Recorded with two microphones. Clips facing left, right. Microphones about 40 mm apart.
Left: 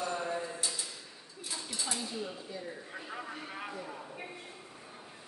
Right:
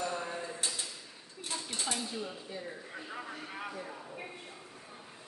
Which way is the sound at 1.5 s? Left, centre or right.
Right.